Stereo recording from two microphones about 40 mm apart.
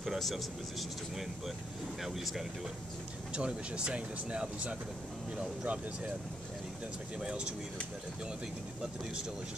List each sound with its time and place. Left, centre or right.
0.0 s speech: centre
3.3 s speech: right